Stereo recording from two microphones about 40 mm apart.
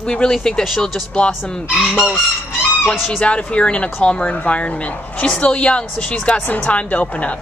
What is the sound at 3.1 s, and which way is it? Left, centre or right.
A woman's voice, left.